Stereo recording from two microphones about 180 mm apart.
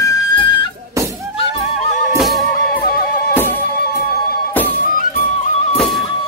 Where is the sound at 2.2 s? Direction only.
Centre (ahead or behind).